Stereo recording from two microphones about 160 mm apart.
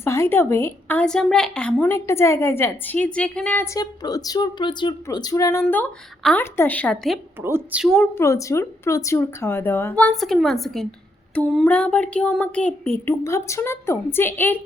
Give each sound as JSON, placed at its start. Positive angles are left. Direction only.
{"t": 0.0, "sound": "a woman's voice", "side_deg": 15}
{"t": 3.8, "sound": "a woman's voice", "side_deg": 25}
{"t": 7.4, "sound": "a woman's voice", "side_deg": -10}
{"t": 8.1, "sound": "a woman's voice", "side_deg": 20}